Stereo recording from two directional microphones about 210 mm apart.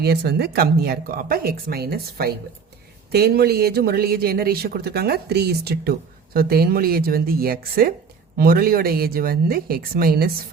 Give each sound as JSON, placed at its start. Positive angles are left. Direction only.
{"t": 0.0, "sound": "speech", "side_deg": -50}